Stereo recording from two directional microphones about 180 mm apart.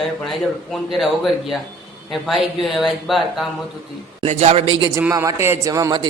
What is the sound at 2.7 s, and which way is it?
Speech, centre (ahead or behind).